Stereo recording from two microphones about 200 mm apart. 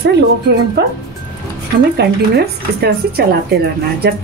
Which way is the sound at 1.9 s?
55° right (ahead or behind).